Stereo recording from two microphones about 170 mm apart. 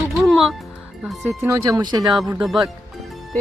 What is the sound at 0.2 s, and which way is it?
Music, centre (ahead or behind).